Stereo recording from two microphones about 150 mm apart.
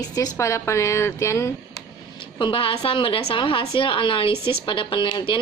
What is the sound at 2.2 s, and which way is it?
A woman's voice, 35° left (ahead or behind).